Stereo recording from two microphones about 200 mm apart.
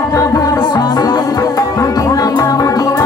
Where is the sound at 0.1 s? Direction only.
15° left (ahead or behind).